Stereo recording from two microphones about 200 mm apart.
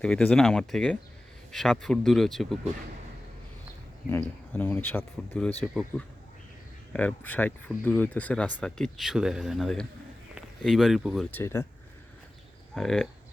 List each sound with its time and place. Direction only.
0.0 s speech: 5° left (ahead or behind)
4.5 s speech: 10° left (ahead or behind)
6.9 s speech: 10° left (ahead or behind)
12.7 s speech: centre (ahead or behind)